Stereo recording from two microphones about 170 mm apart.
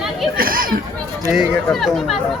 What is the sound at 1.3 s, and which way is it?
Speech, centre (ahead or behind).